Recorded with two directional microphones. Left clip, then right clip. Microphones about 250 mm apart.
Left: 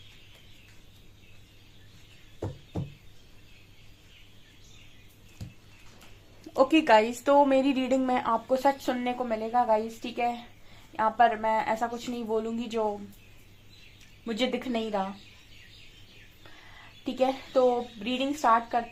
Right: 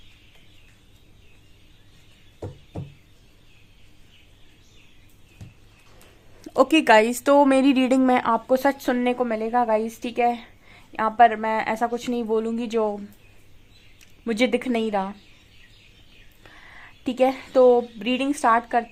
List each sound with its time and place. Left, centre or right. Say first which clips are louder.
6.4 s speech: right 5 dB; right
14.3 s speech: right 7 dB; right
17.0 s speech: right 6 dB; right